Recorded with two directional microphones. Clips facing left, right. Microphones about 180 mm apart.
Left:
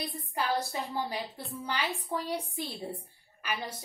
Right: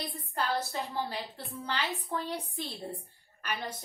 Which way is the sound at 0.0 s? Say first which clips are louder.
Left 1 dB; 10° left (ahead or behind).